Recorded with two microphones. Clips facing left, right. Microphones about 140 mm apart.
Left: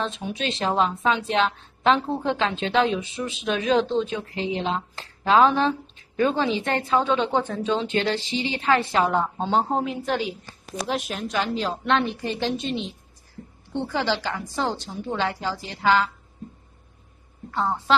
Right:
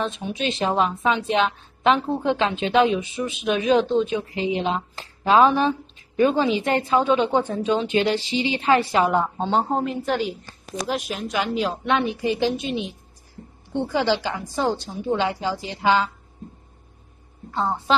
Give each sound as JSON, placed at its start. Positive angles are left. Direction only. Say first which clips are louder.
{"t": 0.0, "sound": "a woman's voice", "louder": "right 2 dB", "side_deg": -5}
{"t": 17.5, "sound": "a woman's voice", "louder": "right 1 dB", "side_deg": -20}